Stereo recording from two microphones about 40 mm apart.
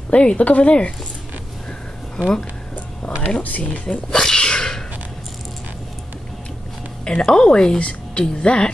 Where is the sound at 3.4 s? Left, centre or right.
Left.